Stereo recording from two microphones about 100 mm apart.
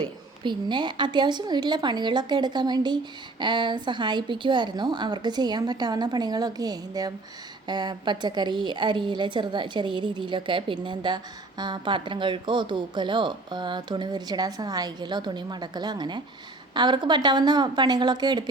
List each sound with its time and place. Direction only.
0.0 s a woman's voice: 50° right (ahead or behind)